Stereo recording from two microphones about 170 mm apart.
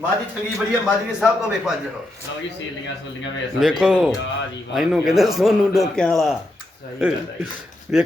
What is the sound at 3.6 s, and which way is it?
Speech, 5° right (ahead or behind).